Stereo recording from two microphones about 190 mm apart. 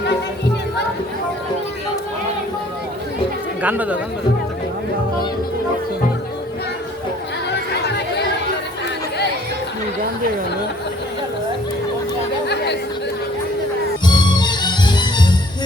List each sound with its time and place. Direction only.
3.6 s speech: 10° right (ahead or behind)
7.5 s chatter: 65° left (ahead or behind)
14.0 s music: 25° left (ahead or behind)